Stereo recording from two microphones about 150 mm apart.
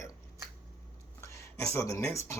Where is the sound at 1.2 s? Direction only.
20° left (ahead or behind).